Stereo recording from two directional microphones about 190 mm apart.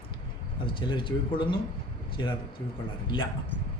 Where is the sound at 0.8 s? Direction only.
25° left (ahead or behind).